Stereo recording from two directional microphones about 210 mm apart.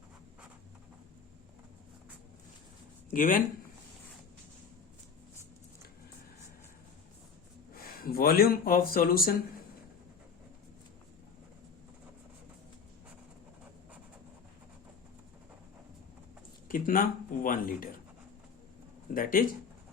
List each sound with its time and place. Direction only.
3.1 s speech: 40° left (ahead or behind)
7.8 s speech: 45° left (ahead or behind)
16.6 s speech: 40° left (ahead or behind)
19.1 s speech: 40° left (ahead or behind)